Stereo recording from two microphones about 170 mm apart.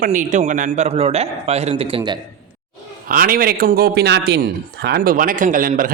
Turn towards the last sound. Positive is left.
turn(degrees=-55)  # may be behind; listen again after turning